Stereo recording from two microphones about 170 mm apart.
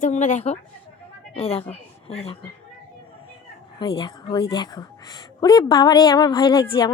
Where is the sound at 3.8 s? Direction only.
25° left (ahead or behind).